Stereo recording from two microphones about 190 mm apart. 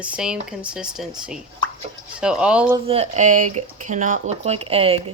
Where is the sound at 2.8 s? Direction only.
35° right (ahead or behind).